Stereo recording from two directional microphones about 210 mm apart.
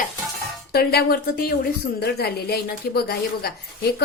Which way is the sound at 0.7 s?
50° left (ahead or behind).